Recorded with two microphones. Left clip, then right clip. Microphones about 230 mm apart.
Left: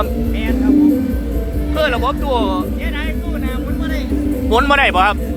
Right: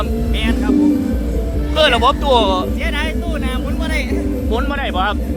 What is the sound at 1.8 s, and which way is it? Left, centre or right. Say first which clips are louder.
Speech: right 4 dB; centre.